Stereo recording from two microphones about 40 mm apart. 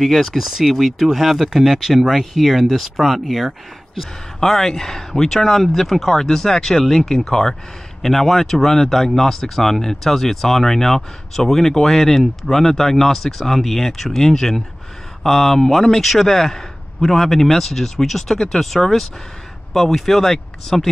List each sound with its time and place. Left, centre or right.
0.0 s speech: centre